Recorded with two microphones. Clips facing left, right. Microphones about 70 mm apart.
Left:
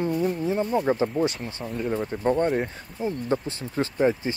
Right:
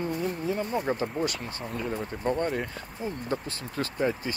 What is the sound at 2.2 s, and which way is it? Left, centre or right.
Speech, left.